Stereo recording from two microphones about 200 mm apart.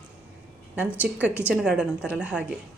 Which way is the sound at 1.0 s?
5° right (ahead or behind).